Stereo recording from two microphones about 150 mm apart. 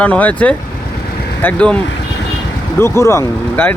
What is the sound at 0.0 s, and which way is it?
Speech, 10° left (ahead or behind).